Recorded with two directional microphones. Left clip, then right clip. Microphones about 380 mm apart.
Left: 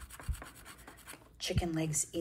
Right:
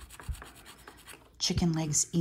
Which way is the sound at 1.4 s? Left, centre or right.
Centre.